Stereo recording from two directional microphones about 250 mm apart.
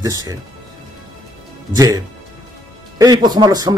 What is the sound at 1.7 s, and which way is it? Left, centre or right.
Speech, centre.